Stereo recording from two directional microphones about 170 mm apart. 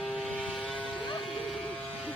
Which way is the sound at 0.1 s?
5° right (ahead or behind).